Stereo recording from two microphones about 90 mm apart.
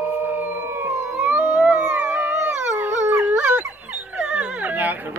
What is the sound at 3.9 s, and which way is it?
Dog, 15° right (ahead or behind).